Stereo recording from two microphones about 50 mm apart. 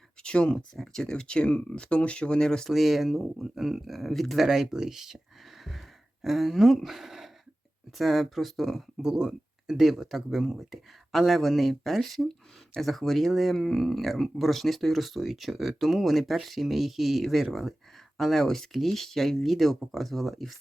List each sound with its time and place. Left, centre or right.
0.2 s speech: centre
2.6 s speech: centre
6.2 s speech: centre
9.0 s speech: centre